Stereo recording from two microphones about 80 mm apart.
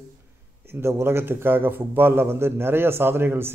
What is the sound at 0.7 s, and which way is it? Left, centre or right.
A man's voice, right.